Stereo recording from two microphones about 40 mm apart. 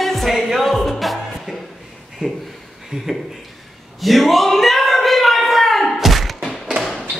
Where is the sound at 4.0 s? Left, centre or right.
Centre.